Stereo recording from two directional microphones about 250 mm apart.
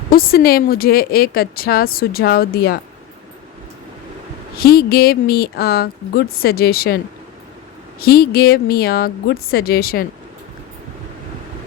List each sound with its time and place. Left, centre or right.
0.1 s speech: left
4.5 s speech: left